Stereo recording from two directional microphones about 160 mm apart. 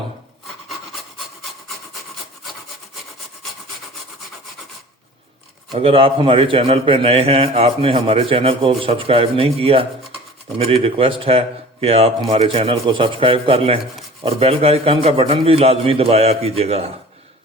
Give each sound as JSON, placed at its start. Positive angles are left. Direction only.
{"t": 5.7, "sound": "a man's voice", "side_deg": -35}